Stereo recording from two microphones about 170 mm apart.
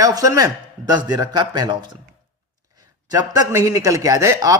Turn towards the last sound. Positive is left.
turn(degrees=-20)  # may be behind; listen again after turning